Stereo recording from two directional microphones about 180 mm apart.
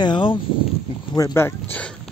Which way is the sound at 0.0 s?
25° left (ahead or behind).